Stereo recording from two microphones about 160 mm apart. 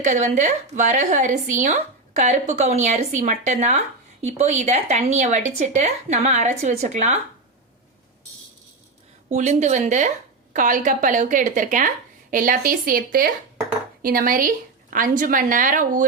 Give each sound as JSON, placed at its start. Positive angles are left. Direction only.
{"t": 0.0, "sound": "speech", "side_deg": -50}
{"t": 9.3, "sound": "speech", "side_deg": -50}